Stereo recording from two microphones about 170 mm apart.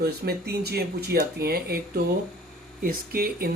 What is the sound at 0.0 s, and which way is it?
Speech, 65° right (ahead or behind).